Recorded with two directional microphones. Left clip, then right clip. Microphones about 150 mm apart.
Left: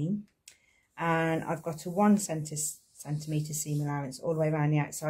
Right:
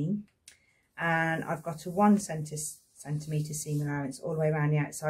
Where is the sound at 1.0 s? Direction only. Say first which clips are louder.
Even; 35° left (ahead or behind).